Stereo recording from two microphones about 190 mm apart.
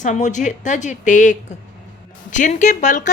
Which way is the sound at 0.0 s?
40° left (ahead or behind).